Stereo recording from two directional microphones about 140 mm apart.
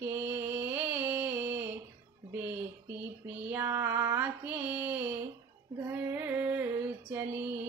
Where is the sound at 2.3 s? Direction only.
10° right (ahead or behind).